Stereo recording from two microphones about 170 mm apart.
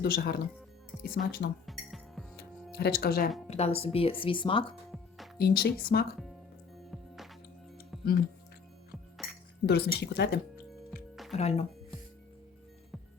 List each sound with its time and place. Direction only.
0.0 s speech: 65° left (ahead or behind)
1.6 s music: centre (ahead or behind)
2.3 s music: 65° left (ahead or behind)
3.4 s speech: 40° left (ahead or behind)
4.9 s music: centre (ahead or behind)
5.4 s speech: 65° left (ahead or behind)
9.6 s speech: 75° left (ahead or behind)
10.9 s music: centre (ahead or behind)
11.3 s speech: 40° left (ahead or behind)